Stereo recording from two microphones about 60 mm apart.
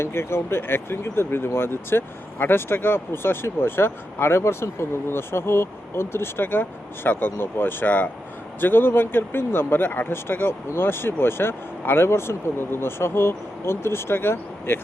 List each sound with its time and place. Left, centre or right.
0.0 s speech: left